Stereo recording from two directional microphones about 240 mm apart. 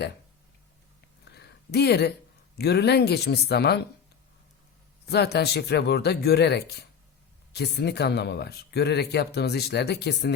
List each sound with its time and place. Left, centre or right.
1.3 s a sound: left
2.6 s speech: left
5.0 s speech: left